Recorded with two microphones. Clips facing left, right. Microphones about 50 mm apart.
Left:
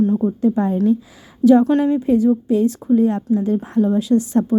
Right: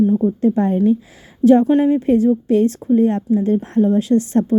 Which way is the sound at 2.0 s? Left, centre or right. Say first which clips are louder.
Right 1 dB; right.